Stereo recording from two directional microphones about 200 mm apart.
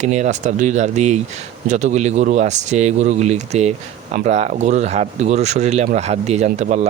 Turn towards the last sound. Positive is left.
turn(degrees=-35)  # may be behind; listen again after turning